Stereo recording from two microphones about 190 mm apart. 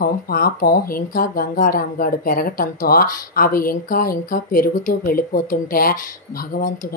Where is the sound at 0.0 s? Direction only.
50° left (ahead or behind).